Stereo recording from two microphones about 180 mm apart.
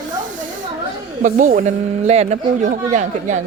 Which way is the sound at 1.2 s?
45° right (ahead or behind).